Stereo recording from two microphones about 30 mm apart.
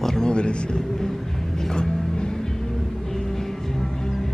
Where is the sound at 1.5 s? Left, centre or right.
Left.